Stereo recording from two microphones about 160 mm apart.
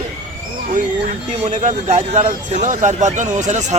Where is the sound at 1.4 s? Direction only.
50° right (ahead or behind).